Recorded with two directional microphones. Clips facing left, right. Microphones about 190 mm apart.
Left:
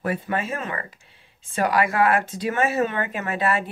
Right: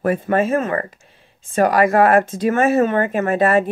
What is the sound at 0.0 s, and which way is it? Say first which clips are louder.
Speech: right 8 dB; 45° right (ahead or behind).